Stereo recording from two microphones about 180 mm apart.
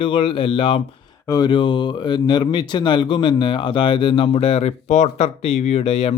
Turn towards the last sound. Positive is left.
turn(degrees=35)  # may be behind; listen again after turning